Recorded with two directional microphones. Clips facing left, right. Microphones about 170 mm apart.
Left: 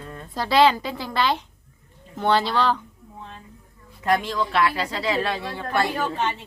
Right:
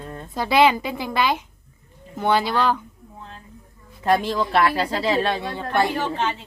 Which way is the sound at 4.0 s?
30° right (ahead or behind).